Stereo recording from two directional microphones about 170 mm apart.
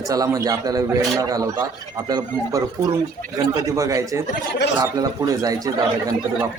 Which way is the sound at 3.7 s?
20° right (ahead or behind).